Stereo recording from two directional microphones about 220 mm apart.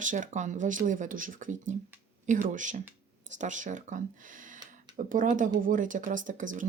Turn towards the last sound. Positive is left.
turn(degrees=-35)  # may be behind; listen again after turning